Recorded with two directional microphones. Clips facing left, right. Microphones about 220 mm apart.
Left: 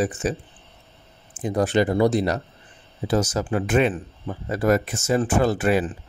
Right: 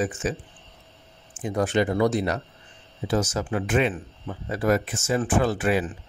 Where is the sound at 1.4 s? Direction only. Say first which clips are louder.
Left 3 dB; 35° left (ahead or behind).